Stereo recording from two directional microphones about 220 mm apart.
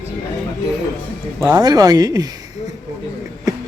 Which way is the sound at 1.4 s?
15° right (ahead or behind).